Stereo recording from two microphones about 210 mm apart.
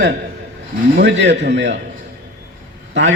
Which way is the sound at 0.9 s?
55° right (ahead or behind).